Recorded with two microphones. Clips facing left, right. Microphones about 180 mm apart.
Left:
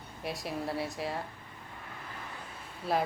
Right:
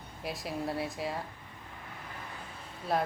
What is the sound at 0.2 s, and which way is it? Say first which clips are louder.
A woman's voice: even; centre (ahead or behind).